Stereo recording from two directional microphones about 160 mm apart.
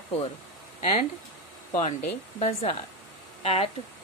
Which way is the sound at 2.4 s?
40° left (ahead or behind).